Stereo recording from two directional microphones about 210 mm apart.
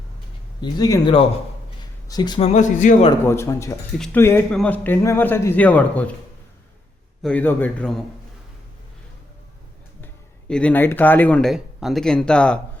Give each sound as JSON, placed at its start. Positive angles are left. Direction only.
{"t": 0.6, "sound": "speech", "side_deg": 15}
{"t": 2.5, "sound": "speech", "side_deg": 35}
{"t": 3.2, "sound": "speech", "side_deg": 15}
{"t": 7.2, "sound": "speech", "side_deg": 5}
{"t": 10.5, "sound": "speech", "side_deg": 5}